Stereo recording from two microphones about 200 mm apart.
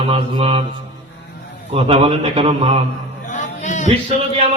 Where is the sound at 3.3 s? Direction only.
35° left (ahead or behind).